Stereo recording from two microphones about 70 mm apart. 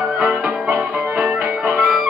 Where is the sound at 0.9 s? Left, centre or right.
Right.